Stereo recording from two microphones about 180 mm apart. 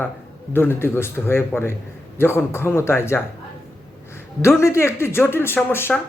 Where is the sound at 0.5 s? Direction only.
10° left (ahead or behind).